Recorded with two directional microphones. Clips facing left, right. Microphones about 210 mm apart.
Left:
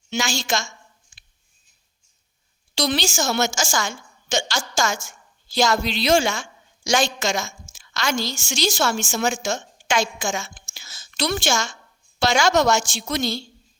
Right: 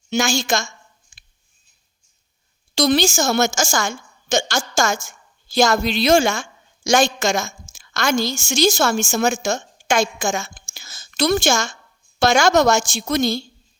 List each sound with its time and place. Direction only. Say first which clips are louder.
0.1 s a woman's voice: right 5 dB; 45° right (ahead or behind)
2.7 s a woman's voice: right 6 dB; 45° right (ahead or behind)
10.8 s a sound: right 5 dB; 45° right (ahead or behind)
12.2 s a woman's voice: right 3 dB; 45° right (ahead or behind)